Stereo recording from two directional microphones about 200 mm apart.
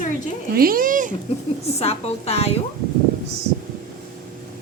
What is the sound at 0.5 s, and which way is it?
Speech, 45° right (ahead or behind).